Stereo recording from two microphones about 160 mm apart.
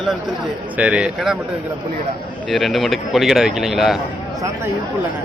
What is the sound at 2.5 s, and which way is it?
Speech, centre (ahead or behind).